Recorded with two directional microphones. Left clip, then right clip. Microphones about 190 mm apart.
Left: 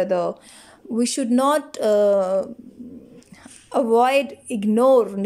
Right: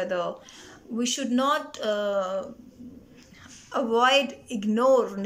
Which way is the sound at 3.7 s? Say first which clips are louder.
Left 4 dB; 25° left (ahead or behind).